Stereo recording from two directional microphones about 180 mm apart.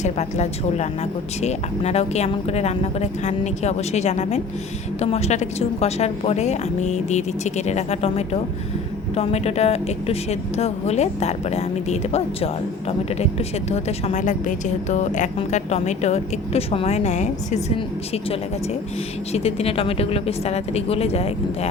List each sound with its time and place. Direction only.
0.0 s a woman's voice: 40° left (ahead or behind)
13.7 s a woman's voice: 35° left (ahead or behind)